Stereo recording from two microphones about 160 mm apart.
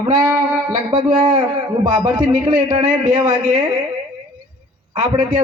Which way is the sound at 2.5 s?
35° right (ahead or behind).